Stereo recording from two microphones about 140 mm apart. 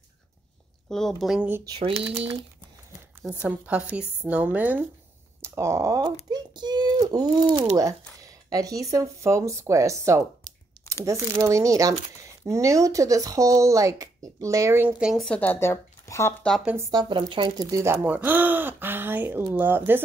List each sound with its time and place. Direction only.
0.8 s speech: 5° left (ahead or behind)
1.6 s a sound: 35° right (ahead or behind)
3.2 s speech: 10° right (ahead or behind); by 6.1 s 25° right (ahead or behind)
6.3 s a sound: 30° right (ahead or behind)
7.7 s speech: 25° right (ahead or behind)
15.0 s speech: 5° right (ahead or behind)
15.2 s speech: 10° left (ahead or behind)
16.9 s speech: 30° right (ahead or behind); by 20.0 s 15° right (ahead or behind)